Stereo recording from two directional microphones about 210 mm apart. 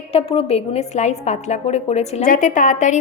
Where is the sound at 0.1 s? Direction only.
25° left (ahead or behind).